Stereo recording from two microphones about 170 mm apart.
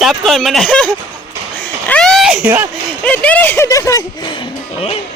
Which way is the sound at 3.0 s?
10° left (ahead or behind).